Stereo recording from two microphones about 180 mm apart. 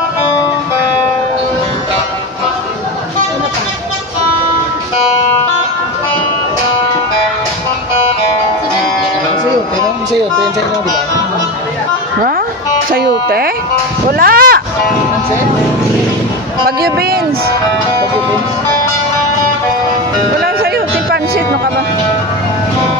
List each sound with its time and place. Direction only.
12.9 s speech: 55° right (ahead or behind)
14.1 s a sound: 55° right (ahead or behind)
16.6 s speech: 60° right (ahead or behind)
20.4 s music: 60° right (ahead or behind)